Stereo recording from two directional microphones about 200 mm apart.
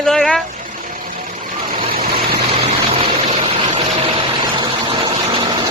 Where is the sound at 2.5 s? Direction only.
30° right (ahead or behind).